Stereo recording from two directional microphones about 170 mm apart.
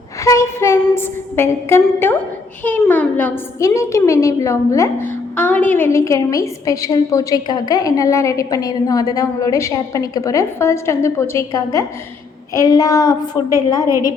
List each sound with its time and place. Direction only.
0.3 s a woman's voice: 15° left (ahead or behind)